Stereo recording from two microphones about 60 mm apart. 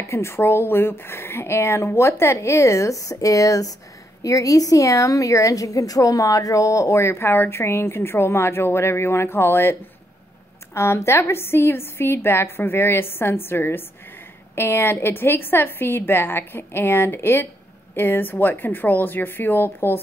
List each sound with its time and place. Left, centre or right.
0.0 s a woman's voice: left